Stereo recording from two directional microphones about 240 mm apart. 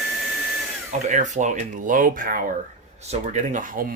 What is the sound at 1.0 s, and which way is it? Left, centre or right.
Speech, right.